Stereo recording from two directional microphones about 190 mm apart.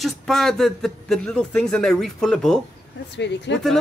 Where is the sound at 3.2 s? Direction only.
65° left (ahead or behind).